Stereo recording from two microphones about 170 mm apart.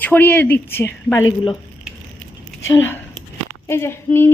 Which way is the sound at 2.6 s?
15° left (ahead or behind).